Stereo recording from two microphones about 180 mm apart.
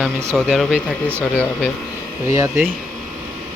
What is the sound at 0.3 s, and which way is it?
Speech, centre (ahead or behind).